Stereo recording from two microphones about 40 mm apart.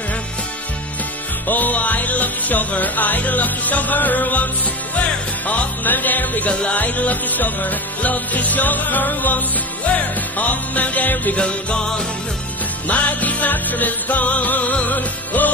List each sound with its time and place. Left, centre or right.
1.5 s music: left
4.9 s music: left
5.9 s music: left
11.3 s music: left
12.8 s music: left